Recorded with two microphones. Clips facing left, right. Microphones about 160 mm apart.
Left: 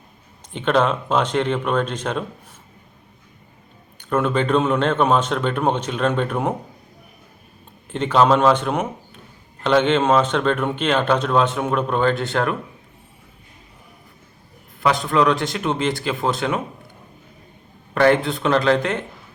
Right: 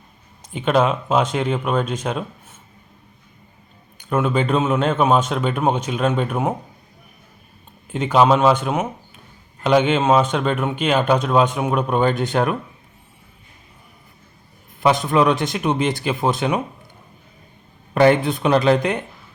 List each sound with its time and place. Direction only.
0.5 s speech: 10° right (ahead or behind)
3.9 s speech: 5° right (ahead or behind)
7.9 s speech: 10° right (ahead or behind)
14.8 s a man's voice: 20° right (ahead or behind)
17.9 s a man's voice: 20° right (ahead or behind)